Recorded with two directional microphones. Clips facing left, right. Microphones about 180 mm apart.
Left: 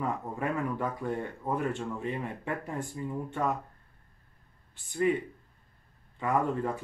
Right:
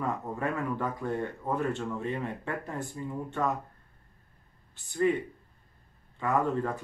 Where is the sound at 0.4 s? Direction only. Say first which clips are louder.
Left 1 dB; 15° left (ahead or behind).